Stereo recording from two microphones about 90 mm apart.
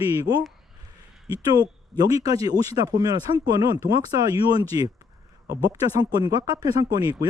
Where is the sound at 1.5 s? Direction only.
45° right (ahead or behind).